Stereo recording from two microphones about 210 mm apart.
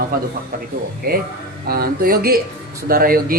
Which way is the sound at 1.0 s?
45° right (ahead or behind).